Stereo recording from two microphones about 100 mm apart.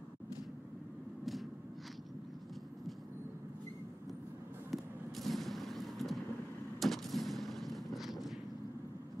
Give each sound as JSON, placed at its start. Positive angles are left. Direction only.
{"t": 4.6, "sound": "fireworks", "side_deg": 0}
{"t": 6.8, "sound": "gunshot", "side_deg": 0}